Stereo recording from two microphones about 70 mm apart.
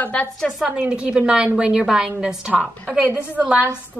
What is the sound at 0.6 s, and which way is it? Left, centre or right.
A woman's voice, centre.